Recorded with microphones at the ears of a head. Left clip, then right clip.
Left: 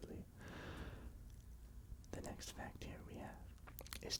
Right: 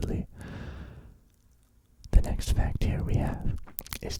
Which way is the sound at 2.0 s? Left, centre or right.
Right.